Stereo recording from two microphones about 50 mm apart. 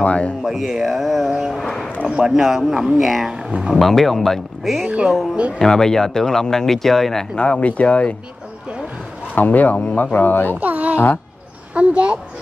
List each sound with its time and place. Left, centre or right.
0.0 s a sound: left
0.4 s speech: centre
1.6 s a sound: centre
2.0 s speech: centre
5.3 s speech: right
5.6 s speech: centre
7.3 s speech: left
9.3 s speech: left
10.6 s speech: right